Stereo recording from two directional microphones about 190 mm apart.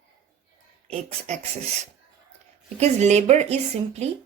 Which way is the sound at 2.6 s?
35° right (ahead or behind).